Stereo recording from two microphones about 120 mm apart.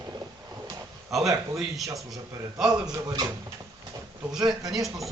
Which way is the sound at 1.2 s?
30° right (ahead or behind).